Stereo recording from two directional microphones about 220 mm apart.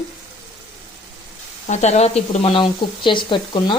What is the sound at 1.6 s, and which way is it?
Speech, 30° left (ahead or behind).